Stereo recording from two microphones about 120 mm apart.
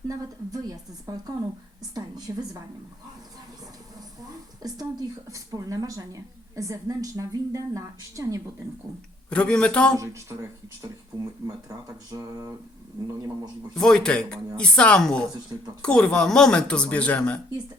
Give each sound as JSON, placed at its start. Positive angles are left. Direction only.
{"t": 0.1, "sound": "a woman's voice", "side_deg": -30}
{"t": 4.6, "sound": "speech", "side_deg": -30}
{"t": 9.3, "sound": "speech", "side_deg": 10}
{"t": 10.0, "sound": "speech", "side_deg": -25}
{"t": 10.8, "sound": "a sound", "side_deg": -30}
{"t": 13.7, "sound": "speech", "side_deg": 5}